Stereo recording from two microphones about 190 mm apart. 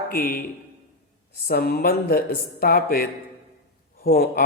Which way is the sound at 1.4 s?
55° left (ahead or behind).